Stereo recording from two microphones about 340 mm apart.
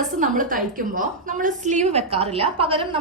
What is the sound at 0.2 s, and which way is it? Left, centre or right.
A woman's voice, right.